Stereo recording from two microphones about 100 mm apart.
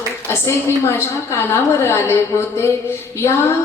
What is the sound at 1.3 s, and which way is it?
A woman's voice, 25° left (ahead or behind).